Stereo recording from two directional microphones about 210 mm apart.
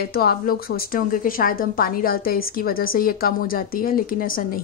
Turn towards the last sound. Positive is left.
turn(degrees=45)  # may be behind; listen again after turning